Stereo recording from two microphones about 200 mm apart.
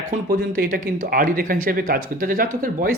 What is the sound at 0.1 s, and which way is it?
Speech, 40° right (ahead or behind).